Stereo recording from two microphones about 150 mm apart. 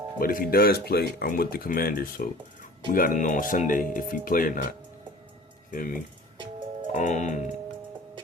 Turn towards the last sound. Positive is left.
turn(degrees=55)  # may be behind; listen again after turning